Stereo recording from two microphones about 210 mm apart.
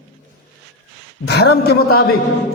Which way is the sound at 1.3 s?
50° left (ahead or behind).